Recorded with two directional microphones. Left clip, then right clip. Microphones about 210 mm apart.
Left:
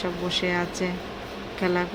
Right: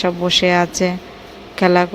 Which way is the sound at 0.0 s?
40° right (ahead or behind).